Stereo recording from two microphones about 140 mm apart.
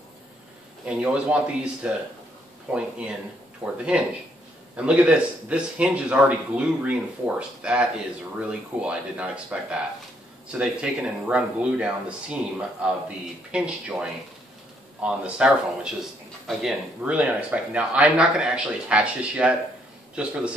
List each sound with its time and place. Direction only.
0.8 s speech: 10° right (ahead or behind)